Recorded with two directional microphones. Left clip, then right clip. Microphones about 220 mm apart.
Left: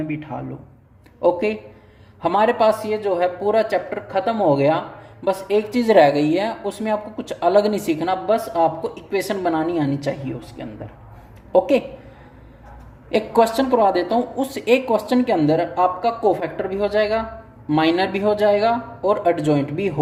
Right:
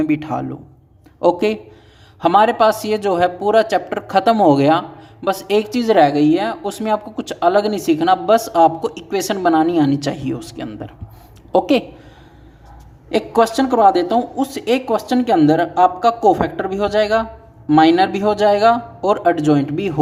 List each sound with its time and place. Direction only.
0.0 s speech: 50° right (ahead or behind)
2.2 s speech: 25° right (ahead or behind)
2.8 s speech: 40° right (ahead or behind)
5.8 s a woman's voice: 15° right (ahead or behind)
6.7 s speech: 30° right (ahead or behind)
13.7 s a woman's voice: 20° right (ahead or behind)